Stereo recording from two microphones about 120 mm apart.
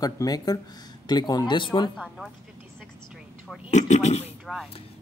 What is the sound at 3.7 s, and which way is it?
Speech, 70° left (ahead or behind).